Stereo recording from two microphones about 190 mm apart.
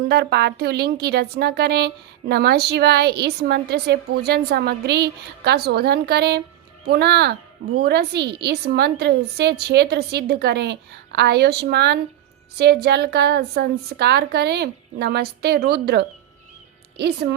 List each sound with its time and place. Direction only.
0.1 s a woman's voice: 60° right (ahead or behind)